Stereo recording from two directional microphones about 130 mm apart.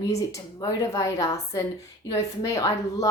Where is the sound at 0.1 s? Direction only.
25° left (ahead or behind).